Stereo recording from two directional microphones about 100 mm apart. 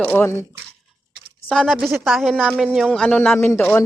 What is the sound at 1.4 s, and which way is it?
Speech, 5° left (ahead or behind).